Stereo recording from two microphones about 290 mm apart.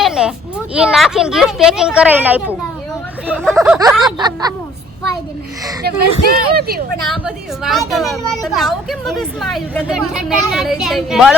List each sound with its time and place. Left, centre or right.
0.0 s a woman's voice: centre
5.8 s speech: right
7.1 s a woman's voice: centre